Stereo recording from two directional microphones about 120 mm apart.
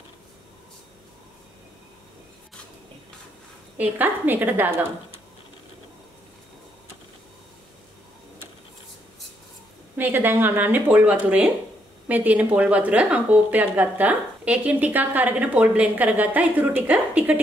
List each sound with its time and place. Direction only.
3.7 s speech: 15° right (ahead or behind)
9.9 s speech: 15° right (ahead or behind)